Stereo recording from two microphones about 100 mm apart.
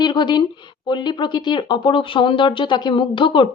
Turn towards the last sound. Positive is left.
turn(degrees=55)  # may be behind; listen again after turning